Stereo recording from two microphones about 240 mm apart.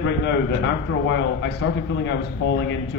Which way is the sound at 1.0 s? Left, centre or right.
Left.